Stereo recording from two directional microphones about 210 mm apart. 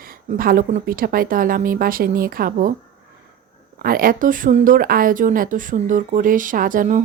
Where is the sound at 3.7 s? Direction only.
45° right (ahead or behind).